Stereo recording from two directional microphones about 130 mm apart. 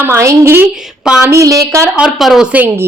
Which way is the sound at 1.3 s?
25° right (ahead or behind).